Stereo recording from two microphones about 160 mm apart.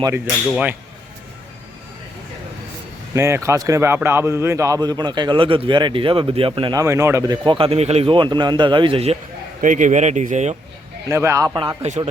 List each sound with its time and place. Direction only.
0.5 s speech: 10° right (ahead or behind)
3.2 s speech: 15° right (ahead or behind)
6.8 s speech: 15° right (ahead or behind)
7.4 s a man's voice: 35° right (ahead or behind)
9.6 s speech: 50° right (ahead or behind)
11.1 s speech: 15° right (ahead or behind)
11.8 s speech: 45° right (ahead or behind)